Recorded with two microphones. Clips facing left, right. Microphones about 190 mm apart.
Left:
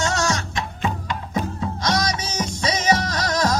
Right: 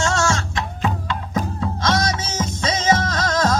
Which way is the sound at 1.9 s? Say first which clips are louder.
Right 1 dB; 25° right (ahead or behind).